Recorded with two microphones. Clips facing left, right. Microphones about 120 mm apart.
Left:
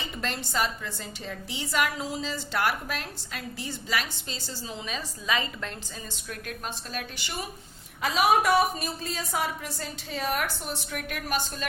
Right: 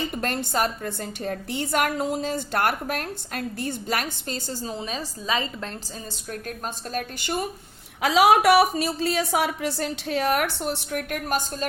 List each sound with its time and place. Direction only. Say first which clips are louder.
0.0 s a woman's voice: right 6 dB; 50° right (ahead or behind); by 5.7 s 35° right (ahead or behind)
6.9 s a woman's voice: right 7 dB; 50° right (ahead or behind)
8.0 s a woman's voice: right 6 dB; 85° right; by 11.6 s 45° right (ahead or behind)